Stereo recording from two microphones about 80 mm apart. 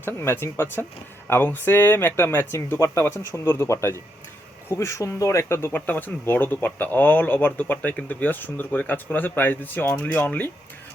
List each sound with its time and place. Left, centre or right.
0.0 s speech: left